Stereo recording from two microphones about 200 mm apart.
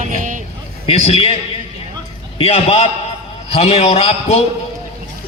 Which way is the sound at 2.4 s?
30° left (ahead or behind).